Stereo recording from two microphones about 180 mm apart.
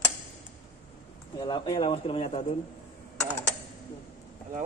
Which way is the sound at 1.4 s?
25° left (ahead or behind).